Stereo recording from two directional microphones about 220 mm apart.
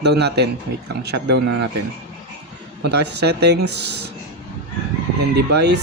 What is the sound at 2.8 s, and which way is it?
Speech, 50° right (ahead or behind).